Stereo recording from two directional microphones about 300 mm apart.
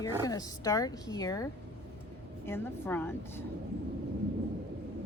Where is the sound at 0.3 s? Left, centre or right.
Centre.